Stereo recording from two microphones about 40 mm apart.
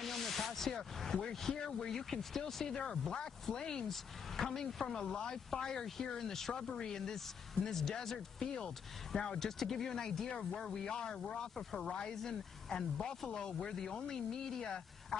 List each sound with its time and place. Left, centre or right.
0.0 s a sound: centre
1.3 s speech: centre
11.5 s speech: centre
11.9 s speech: centre
13.3 s speech: centre